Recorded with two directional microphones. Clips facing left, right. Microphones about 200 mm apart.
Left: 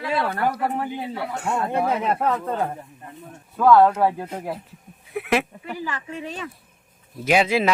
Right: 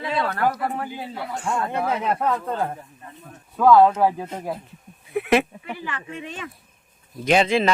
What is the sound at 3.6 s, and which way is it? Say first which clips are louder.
Speech: right 1 dB; centre (ahead or behind).